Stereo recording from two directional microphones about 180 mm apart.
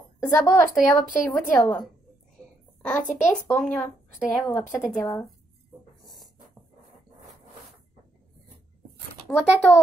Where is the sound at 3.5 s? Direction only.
10° left (ahead or behind).